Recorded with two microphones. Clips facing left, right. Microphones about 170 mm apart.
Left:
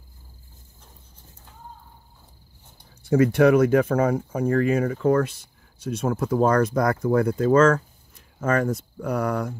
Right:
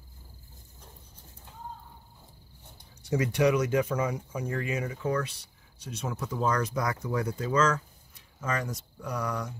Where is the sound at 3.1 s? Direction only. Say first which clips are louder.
Left 8 dB; 55° left (ahead or behind).